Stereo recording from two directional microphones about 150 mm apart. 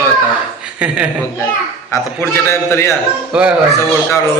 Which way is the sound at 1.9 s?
15° left (ahead or behind).